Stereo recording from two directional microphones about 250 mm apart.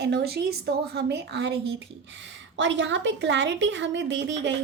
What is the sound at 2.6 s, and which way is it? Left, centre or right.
A woman's voice, right.